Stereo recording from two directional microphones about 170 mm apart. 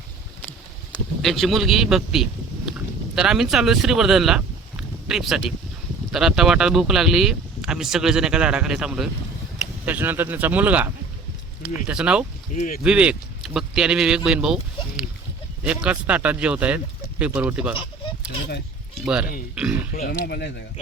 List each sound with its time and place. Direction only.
0.9 s speech: centre (ahead or behind)
12.5 s speech: 50° left (ahead or behind)
12.8 s speech: 5° right (ahead or behind)
19.5 s speech: 10° right (ahead or behind)
19.9 s speech: 60° left (ahead or behind)